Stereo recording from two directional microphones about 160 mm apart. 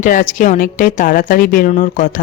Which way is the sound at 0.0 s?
55° left (ahead or behind).